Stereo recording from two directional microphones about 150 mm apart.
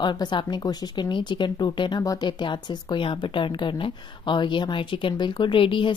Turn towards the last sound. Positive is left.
turn(degrees=35)  # may be behind; listen again after turning